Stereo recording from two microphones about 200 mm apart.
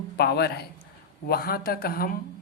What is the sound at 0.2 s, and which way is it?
A man's voice, 55° left (ahead or behind).